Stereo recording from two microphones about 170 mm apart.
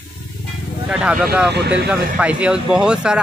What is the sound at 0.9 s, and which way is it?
Speech, 5° right (ahead or behind).